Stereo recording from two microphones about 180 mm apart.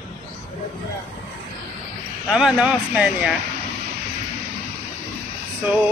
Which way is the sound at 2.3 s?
5° right (ahead or behind).